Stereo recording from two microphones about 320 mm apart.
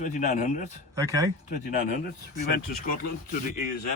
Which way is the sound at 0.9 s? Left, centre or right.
Centre.